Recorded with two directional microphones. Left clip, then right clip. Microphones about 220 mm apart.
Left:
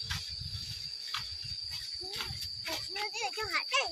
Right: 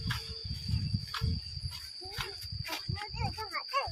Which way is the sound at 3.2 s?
25° left (ahead or behind).